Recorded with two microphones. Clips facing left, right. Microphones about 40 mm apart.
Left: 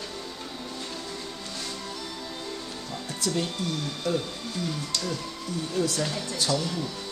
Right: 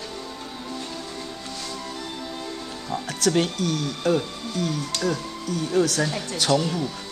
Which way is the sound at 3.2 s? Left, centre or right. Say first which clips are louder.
Right 7 dB; right.